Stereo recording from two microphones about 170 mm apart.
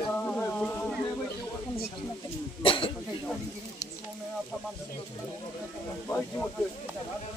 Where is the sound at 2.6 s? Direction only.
30° left (ahead or behind).